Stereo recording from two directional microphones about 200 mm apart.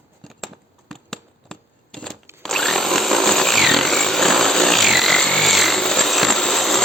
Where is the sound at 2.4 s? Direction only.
Centre (ahead or behind).